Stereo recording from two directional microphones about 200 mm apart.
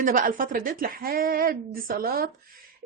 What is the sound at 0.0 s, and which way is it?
Speech, 40° right (ahead or behind).